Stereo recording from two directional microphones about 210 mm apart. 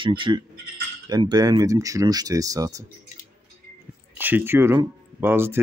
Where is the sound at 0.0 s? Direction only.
25° right (ahead or behind).